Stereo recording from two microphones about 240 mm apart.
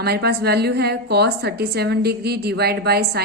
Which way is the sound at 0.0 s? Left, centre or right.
Right.